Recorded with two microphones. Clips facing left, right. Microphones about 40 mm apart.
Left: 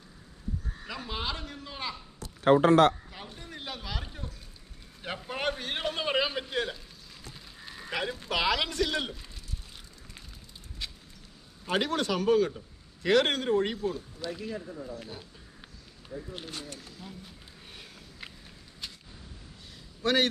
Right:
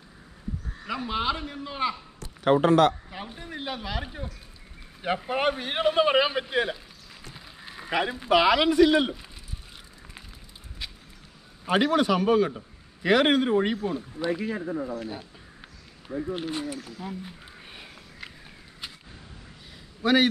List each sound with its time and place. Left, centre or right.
0.8 s a man's voice: centre
3.1 s a man's voice: centre
10.8 s a sound: centre
11.6 s a man's voice: centre; by 14.7 s right
14.7 s speech: right
15.0 s a sound: centre
16.1 s speech: right
16.3 s speech: right
17.1 s a sound: right
18.2 s walk: centre
18.8 s arrow: centre
20.0 s a man's voice: centre